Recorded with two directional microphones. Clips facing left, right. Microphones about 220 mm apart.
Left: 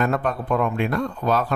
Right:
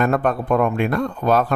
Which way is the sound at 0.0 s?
55° right (ahead or behind).